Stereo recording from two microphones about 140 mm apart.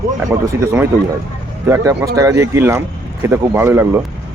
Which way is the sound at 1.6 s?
20° right (ahead or behind).